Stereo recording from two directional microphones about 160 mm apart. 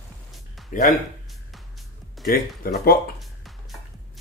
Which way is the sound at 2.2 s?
65° left (ahead or behind).